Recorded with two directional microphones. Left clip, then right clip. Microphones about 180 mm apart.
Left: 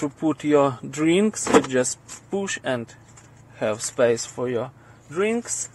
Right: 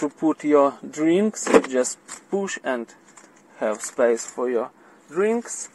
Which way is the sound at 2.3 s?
Centre (ahead or behind).